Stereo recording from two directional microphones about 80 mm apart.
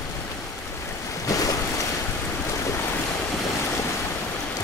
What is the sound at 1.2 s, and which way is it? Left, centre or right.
Waves, left.